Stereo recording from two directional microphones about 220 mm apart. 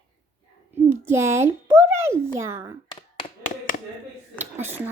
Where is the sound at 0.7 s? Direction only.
10° right (ahead or behind).